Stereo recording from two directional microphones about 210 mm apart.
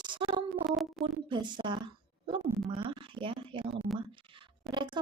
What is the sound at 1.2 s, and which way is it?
A woman's voice, 20° right (ahead or behind).